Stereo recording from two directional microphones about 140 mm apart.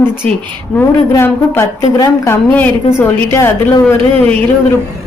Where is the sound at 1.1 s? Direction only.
20° left (ahead or behind).